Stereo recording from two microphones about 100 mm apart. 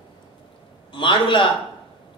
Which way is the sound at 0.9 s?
55° left (ahead or behind).